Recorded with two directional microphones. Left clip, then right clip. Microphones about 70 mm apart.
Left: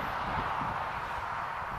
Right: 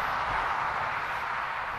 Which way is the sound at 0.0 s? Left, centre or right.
Right.